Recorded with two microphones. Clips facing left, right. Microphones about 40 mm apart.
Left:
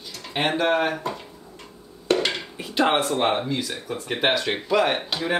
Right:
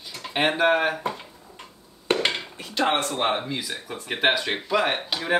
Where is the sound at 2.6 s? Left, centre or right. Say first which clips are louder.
Left 3 dB; centre.